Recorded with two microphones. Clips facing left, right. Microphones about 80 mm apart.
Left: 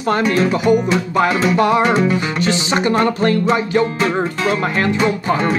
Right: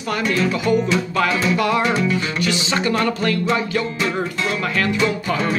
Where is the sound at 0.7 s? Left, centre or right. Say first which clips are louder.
Left 4 dB; left.